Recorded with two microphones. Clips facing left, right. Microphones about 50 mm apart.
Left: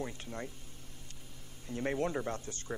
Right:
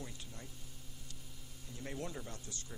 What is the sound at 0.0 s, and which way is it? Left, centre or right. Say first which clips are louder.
Speech: left 10 dB; left.